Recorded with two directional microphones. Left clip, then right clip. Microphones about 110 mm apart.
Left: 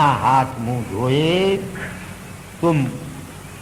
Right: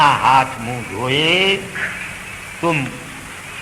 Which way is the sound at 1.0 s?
20° right (ahead or behind).